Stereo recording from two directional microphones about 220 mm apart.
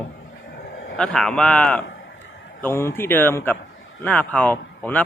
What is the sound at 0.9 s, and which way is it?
Speech, 5° left (ahead or behind).